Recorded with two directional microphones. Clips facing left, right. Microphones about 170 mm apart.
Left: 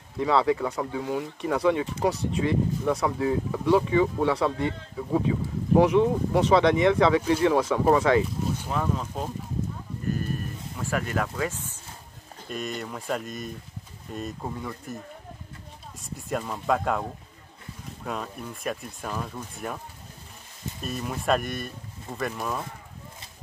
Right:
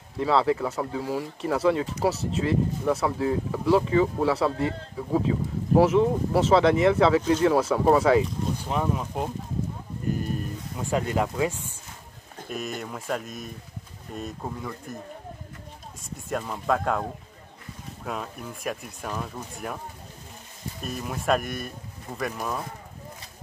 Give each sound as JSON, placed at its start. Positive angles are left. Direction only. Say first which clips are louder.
{"t": 0.2, "sound": "speech", "louder": "even", "side_deg": 0}
{"t": 7.2, "sound": "speech", "louder": "right 1 dB", "side_deg": 10}
{"t": 7.4, "sound": "speech", "louder": "even", "side_deg": -5}
{"t": 10.0, "sound": "a sound", "louder": "right 1 dB", "side_deg": -15}
{"t": 12.4, "sound": "speech", "louder": "even", "side_deg": -5}
{"t": 16.0, "sound": "speech", "louder": "even", "side_deg": 0}
{"t": 18.0, "sound": "speech", "louder": "even", "side_deg": 0}
{"t": 20.8, "sound": "speech", "louder": "even", "side_deg": 0}